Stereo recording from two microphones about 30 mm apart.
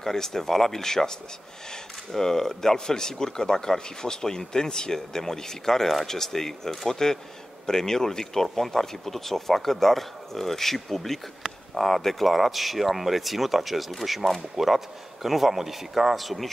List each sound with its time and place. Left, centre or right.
0.0 s speech: centre
2.1 s a man's voice: centre